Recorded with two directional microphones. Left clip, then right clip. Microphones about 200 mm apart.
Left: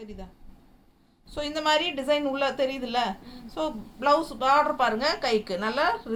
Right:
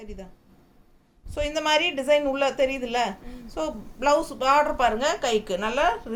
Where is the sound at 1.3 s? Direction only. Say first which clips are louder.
Right 2 dB; 25° right (ahead or behind).